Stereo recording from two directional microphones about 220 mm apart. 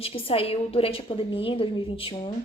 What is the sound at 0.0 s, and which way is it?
Speech, 25° left (ahead or behind).